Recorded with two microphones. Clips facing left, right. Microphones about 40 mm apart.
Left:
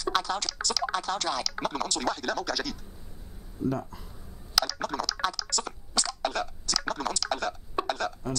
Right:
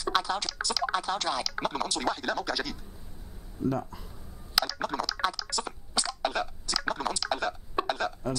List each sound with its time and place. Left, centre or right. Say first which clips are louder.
0.0 s speech: even; centre
3.6 s speech: even; centre
4.6 s a sound: even; centre